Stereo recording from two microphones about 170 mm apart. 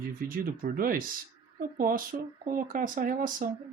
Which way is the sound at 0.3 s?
55° right (ahead or behind).